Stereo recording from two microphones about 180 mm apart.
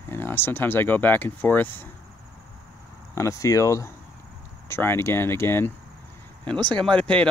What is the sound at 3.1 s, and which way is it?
Speech, 15° left (ahead or behind).